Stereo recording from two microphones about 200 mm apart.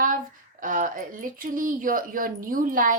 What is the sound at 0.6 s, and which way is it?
A woman's voice, 40° right (ahead or behind).